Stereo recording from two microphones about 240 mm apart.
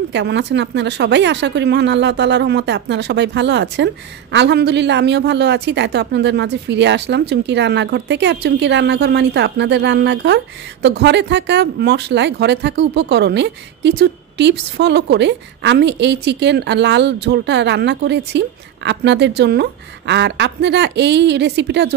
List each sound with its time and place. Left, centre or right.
0.1 s a woman's voice: right